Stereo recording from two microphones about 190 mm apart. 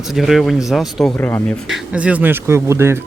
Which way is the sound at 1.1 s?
10° left (ahead or behind).